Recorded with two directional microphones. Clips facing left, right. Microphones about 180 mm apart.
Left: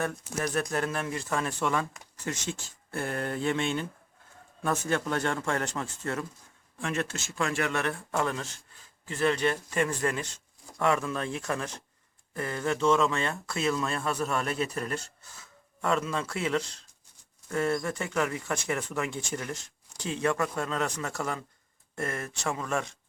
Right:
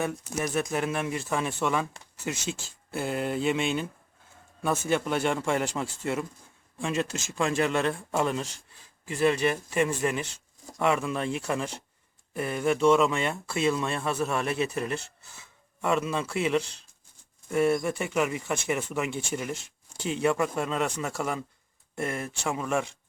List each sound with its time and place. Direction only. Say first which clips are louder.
0.0 s speech: right 1 dB; 10° right (ahead or behind)
4.9 s speech: right 4 dB; 5° right (ahead or behind)
17.5 s speech: right 4 dB; 10° right (ahead or behind)
19.5 s a sound: right 3 dB; 30° right (ahead or behind)
20.2 s speech: right 3 dB; 15° right (ahead or behind)